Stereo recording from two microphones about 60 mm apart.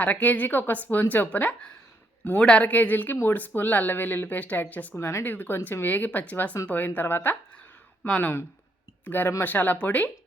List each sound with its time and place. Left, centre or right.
0.0 s a woman's voice: left
4.9 s speech: left
5.8 s a woman's voice: left
8.0 s a woman's voice: left